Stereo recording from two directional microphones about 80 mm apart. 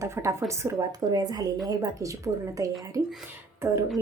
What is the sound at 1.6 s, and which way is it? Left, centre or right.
A woman's voice, right.